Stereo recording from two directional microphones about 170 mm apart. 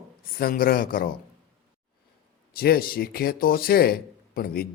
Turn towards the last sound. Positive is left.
turn(degrees=60)  # may be behind; listen again after turning